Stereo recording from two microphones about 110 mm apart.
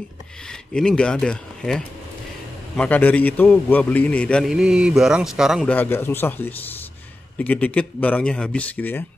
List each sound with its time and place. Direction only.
0.7 s a man's voice: 10° left (ahead or behind)
4.5 s a sound: 5° right (ahead or behind)
5.7 s a man's voice: 20° left (ahead or behind)